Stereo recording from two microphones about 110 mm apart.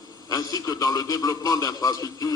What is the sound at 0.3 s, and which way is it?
A man's voice, 30° left (ahead or behind).